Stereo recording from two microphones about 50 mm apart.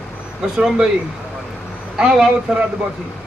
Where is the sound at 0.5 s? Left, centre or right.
Centre.